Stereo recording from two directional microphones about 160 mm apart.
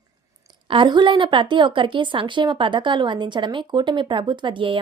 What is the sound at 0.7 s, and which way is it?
A woman's voice, 30° right (ahead or behind).